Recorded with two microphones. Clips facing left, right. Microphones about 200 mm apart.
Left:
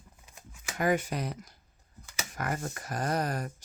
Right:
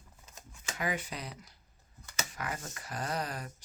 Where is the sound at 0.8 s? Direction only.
50° left (ahead or behind).